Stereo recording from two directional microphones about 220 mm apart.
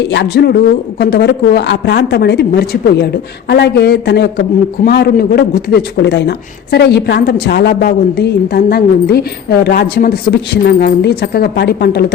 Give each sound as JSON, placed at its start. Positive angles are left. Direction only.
{"t": 0.1, "sound": "speech", "side_deg": 50}